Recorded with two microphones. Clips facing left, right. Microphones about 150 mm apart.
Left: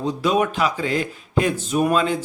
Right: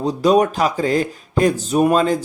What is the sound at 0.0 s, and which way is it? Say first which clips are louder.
A man's voice: right 5 dB; 35° right (ahead or behind).